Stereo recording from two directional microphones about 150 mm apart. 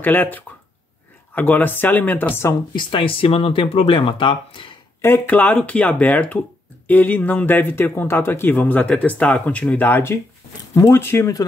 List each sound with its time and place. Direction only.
0.0 s speech: 10° left (ahead or behind)
2.7 s speech: 35° left (ahead or behind)
5.0 s speech: 15° left (ahead or behind)